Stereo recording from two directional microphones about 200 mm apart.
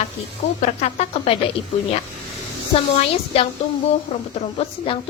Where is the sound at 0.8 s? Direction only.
30° left (ahead or behind).